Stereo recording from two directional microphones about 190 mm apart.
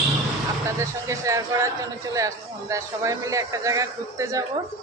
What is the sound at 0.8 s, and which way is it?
A man's voice, 15° right (ahead or behind).